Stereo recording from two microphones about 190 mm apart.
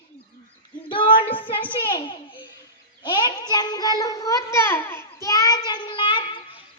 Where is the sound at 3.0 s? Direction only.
25° left (ahead or behind).